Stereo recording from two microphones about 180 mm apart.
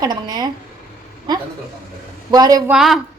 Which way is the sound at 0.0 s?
25° right (ahead or behind).